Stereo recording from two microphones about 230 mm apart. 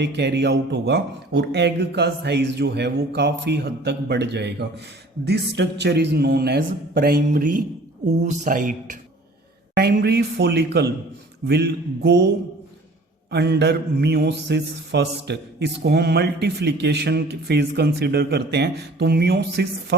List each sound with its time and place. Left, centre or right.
0.0 s mantra: right
8.0 s speech: right
9.7 s mantra: right
13.3 s mantra: right